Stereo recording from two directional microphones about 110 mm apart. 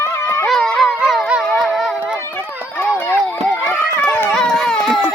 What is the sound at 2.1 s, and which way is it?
Run, 20° left (ahead or behind).